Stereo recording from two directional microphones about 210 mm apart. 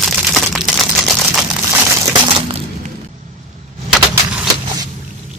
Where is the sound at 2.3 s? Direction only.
30° right (ahead or behind).